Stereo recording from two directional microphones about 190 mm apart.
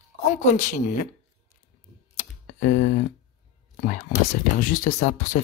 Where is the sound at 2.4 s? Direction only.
40° left (ahead or behind).